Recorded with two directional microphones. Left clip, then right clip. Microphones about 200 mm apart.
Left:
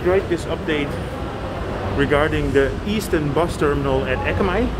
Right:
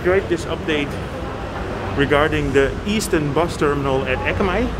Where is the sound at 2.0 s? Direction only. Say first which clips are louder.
Right 2 dB; 15° right (ahead or behind).